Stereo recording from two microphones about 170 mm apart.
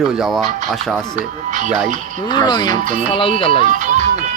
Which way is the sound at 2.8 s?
50° right (ahead or behind).